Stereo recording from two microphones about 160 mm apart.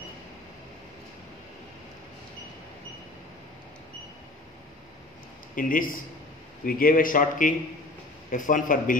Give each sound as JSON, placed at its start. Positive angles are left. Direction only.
{"t": 5.6, "sound": "a man's voice", "side_deg": 60}